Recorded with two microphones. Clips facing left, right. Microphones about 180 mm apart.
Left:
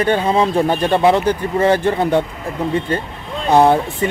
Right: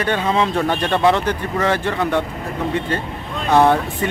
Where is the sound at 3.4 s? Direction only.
25° left (ahead or behind).